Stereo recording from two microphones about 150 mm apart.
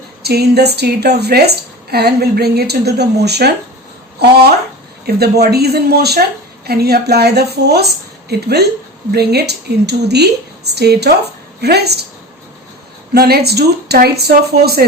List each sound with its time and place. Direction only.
0.2 s a woman's voice: 90° right
5.0 s a woman's voice: 90° right
13.1 s a woman's voice: 90° right